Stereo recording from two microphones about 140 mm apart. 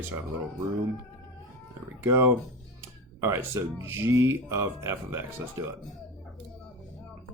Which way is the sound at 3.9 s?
20° right (ahead or behind).